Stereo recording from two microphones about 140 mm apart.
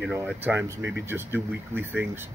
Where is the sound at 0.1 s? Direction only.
15° right (ahead or behind).